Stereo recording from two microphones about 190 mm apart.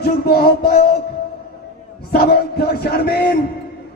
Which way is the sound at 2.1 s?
55° left (ahead or behind).